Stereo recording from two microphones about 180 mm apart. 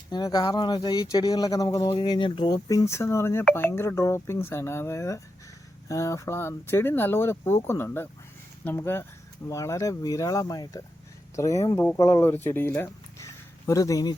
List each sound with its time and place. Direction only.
0.1 s speech: 20° left (ahead or behind)